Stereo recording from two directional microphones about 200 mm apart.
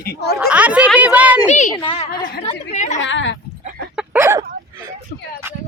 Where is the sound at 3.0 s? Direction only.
65° left (ahead or behind).